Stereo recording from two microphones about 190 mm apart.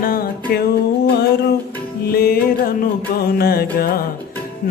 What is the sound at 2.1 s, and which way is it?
Music, 55° left (ahead or behind).